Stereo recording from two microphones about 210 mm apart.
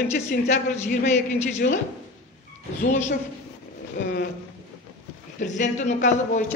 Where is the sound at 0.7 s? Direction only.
35° left (ahead or behind).